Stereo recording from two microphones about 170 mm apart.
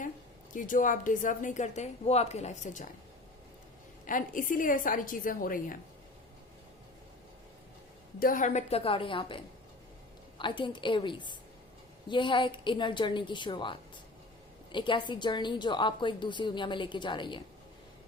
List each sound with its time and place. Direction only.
0.5 s speech: 50° left (ahead or behind)
4.0 s speech: 50° left (ahead or behind)
8.2 s a woman's voice: 50° left (ahead or behind); by 17.4 s 25° left (ahead or behind)